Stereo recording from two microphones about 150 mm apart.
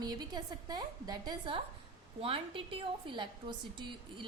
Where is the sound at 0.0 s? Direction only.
25° right (ahead or behind).